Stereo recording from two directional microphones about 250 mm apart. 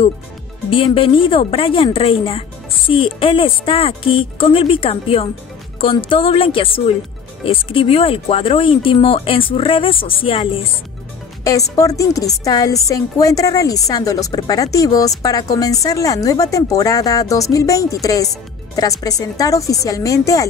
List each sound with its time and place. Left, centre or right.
0.7 s speech: left